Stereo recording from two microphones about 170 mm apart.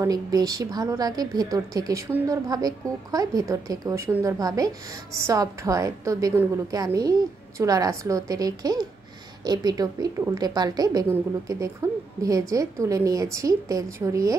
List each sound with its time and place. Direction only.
0.0 s a woman's voice: 20° right (ahead or behind)